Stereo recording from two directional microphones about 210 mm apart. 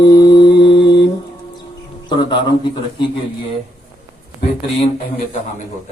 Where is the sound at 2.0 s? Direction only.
20° left (ahead or behind).